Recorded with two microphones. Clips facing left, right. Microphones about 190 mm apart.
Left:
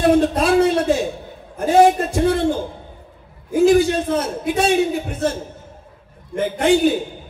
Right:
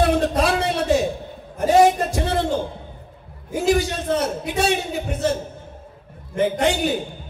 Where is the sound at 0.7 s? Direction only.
60° left (ahead or behind).